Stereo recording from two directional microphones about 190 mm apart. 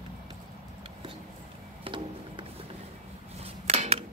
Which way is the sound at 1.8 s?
25° right (ahead or behind).